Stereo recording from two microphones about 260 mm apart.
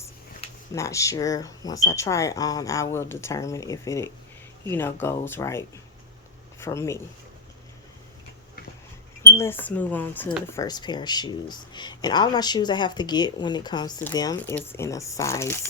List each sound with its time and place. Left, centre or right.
0.7 s speech: centre
9.3 s speech: centre